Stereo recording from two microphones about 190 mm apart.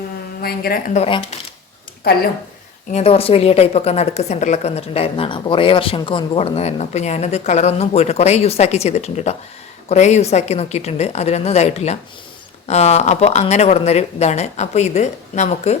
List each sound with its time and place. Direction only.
0.4 s a woman's voice: 55° left (ahead or behind)
0.9 s a woman's voice: 30° left (ahead or behind)
2.0 s a woman's voice: 55° left (ahead or behind)
2.9 s a woman's voice: 30° left (ahead or behind)